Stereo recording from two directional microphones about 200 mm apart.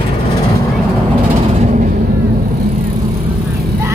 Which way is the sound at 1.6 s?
40° right (ahead or behind).